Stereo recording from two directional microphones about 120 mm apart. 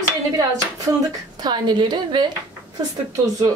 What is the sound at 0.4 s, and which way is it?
A woman's voice, 30° right (ahead or behind).